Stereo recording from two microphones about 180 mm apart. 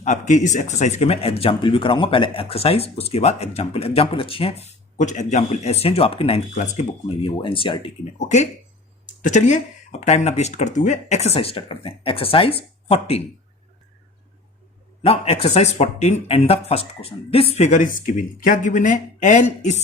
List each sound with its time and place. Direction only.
0.0 s speech: 40° left (ahead or behind)
7.3 s speech: 30° left (ahead or behind)
9.0 s speech: 45° left (ahead or behind)
15.0 s speech: 35° left (ahead or behind)